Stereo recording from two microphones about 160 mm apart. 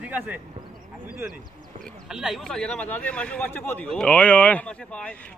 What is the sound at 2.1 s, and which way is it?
A man's voice, centre (ahead or behind).